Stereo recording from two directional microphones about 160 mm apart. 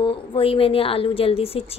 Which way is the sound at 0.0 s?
35° left (ahead or behind).